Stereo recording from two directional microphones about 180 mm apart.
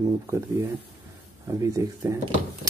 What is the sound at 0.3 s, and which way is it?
Speech, 15° right (ahead or behind).